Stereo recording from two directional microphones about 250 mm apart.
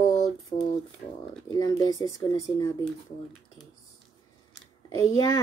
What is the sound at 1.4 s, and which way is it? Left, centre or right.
Speech, centre.